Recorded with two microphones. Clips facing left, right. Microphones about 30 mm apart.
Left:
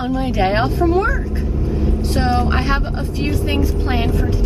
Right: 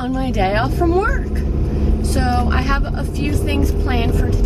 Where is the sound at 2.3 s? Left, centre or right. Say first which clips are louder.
Left 1 dB; centre.